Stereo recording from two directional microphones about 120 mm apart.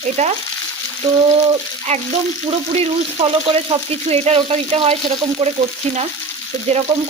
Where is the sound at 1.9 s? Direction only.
65° right (ahead or behind).